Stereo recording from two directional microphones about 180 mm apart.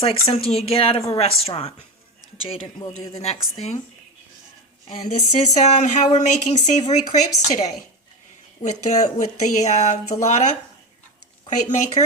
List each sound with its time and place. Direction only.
0.0 s a man's voice: 30° left (ahead or behind)
3.2 s speech: 35° left (ahead or behind)
4.9 s speech: 40° left (ahead or behind)
8.9 s speech: 40° left (ahead or behind)
11.4 s speech: 40° left (ahead or behind)